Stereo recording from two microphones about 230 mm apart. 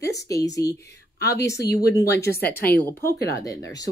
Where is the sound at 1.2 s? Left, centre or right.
Left.